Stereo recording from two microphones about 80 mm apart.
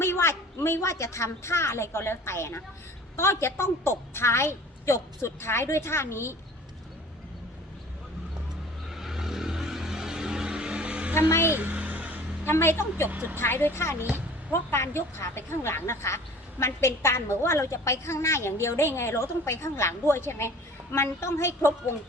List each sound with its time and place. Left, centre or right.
0.0 s a woman's voice: left
8.9 s vehicle: centre
11.1 s speech: left
11.5 s music: centre
12.5 s speech: left
13.1 s speech: right
13.4 s speech: left